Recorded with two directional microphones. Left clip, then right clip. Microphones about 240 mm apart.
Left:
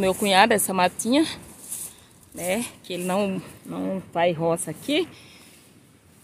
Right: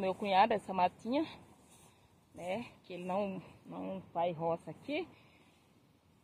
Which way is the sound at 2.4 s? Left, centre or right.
Centre.